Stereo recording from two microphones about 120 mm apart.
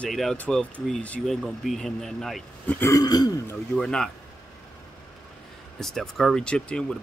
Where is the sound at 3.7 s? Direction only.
5° left (ahead or behind).